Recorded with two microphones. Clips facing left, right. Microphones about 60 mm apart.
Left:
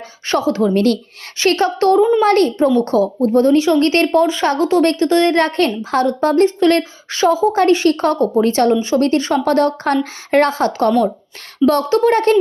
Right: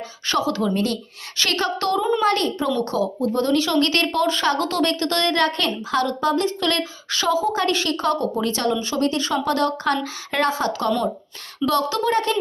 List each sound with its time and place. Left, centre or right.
0.3 s speech: left
0.7 s speech: left
1.4 s speech: left
9.0 s speech: left